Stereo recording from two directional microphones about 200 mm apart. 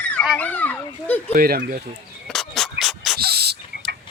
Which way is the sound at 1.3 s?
45° right (ahead or behind).